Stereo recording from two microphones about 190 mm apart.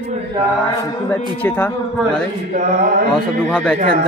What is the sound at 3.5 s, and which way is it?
Speech, 5° left (ahead or behind).